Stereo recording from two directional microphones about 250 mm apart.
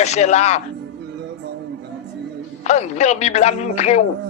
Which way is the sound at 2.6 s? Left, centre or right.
Left.